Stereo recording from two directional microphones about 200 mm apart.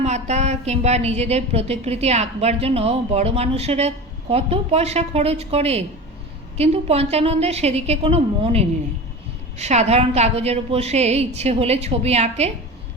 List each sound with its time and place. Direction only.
0.0 s a woman's voice: 35° right (ahead or behind)